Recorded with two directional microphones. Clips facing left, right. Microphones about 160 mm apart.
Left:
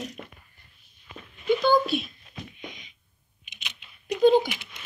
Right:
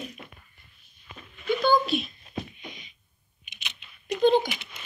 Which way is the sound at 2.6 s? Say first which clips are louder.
Even; 20° left (ahead or behind).